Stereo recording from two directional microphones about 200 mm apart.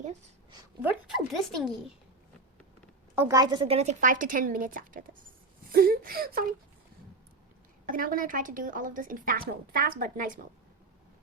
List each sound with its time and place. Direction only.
0.8 s speech: 5° right (ahead or behind)
3.2 s a woman's voice: 15° right (ahead or behind); by 6.4 s 45° right (ahead or behind)
7.9 s speech: 45° right (ahead or behind)